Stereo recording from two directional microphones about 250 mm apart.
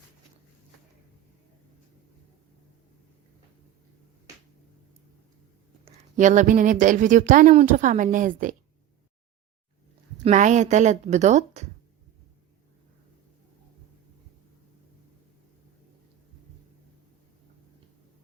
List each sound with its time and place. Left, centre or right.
5.8 s speech: right
10.2 s a woman's voice: right